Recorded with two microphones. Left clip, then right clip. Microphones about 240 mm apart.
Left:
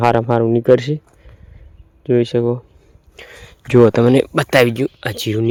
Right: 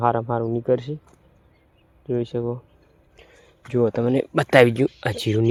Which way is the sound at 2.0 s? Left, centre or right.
Left.